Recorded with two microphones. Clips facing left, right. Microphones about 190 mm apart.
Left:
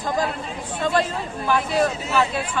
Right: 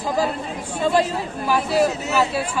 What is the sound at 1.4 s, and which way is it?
Speech, 5° right (ahead or behind).